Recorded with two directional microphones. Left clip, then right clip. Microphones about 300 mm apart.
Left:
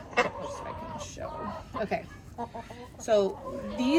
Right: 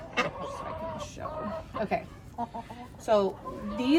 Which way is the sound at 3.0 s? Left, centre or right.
Centre.